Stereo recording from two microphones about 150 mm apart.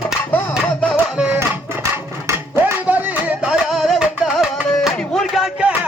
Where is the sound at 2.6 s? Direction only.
10° right (ahead or behind).